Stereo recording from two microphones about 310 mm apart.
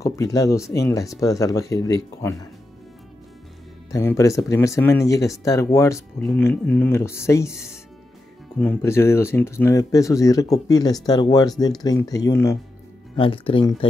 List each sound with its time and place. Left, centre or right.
0.0 s speech: centre
3.9 s speech: centre